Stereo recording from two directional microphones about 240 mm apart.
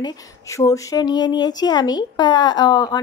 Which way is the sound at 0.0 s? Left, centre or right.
Centre.